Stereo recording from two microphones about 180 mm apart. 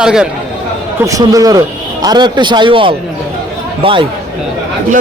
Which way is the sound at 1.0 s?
20° right (ahead or behind).